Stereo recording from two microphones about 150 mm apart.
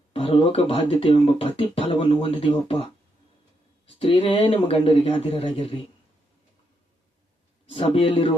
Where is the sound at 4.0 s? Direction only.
40° left (ahead or behind).